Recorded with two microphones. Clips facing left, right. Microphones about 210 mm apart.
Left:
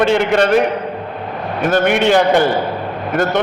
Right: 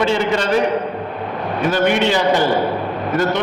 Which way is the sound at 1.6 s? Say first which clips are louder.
Left 3 dB; 50° left (ahead or behind).